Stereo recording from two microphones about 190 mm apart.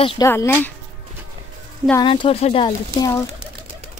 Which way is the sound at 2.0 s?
25° left (ahead or behind).